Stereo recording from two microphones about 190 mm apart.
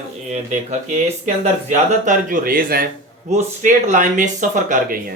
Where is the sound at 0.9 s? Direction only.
40° right (ahead or behind).